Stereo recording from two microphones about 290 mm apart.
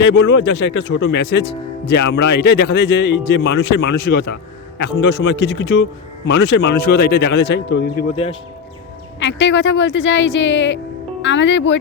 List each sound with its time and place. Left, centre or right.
0.0 s speech: left
8.1 s speech: centre
9.2 s speech: left